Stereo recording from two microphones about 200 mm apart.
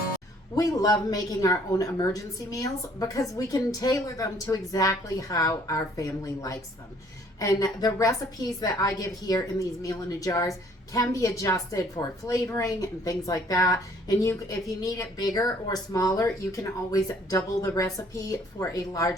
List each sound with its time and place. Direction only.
0.5 s a woman's voice: 20° left (ahead or behind)